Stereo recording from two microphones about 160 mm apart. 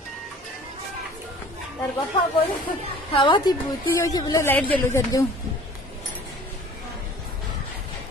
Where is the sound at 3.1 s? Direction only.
30° left (ahead or behind); by 5.0 s 10° left (ahead or behind).